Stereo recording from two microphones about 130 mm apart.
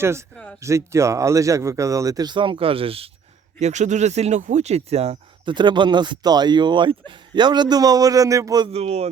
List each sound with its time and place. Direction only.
0.0 s speech: 20° right (ahead or behind); by 3.1 s 45° right (ahead or behind)
3.6 s speech: 65° right (ahead or behind)
5.5 s speech: 35° right (ahead or behind)
8.7 s speech: 55° right (ahead or behind)